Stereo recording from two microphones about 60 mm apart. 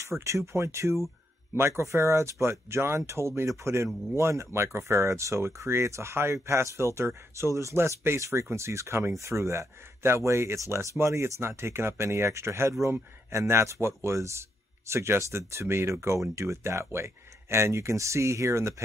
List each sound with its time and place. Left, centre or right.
0.2 s speech: right